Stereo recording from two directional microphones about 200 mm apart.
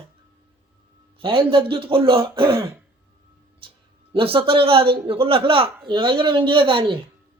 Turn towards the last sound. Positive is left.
turn(degrees=-25)  # may be behind; listen again after turning